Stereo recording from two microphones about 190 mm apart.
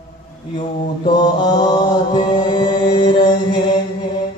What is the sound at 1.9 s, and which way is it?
Mantra, 25° left (ahead or behind).